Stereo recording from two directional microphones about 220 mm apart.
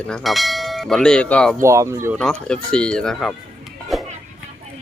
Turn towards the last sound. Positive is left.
turn(degrees=0)  # may be behind; listen again after turning